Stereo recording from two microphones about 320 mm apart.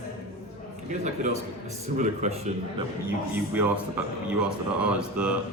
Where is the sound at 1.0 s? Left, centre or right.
Right.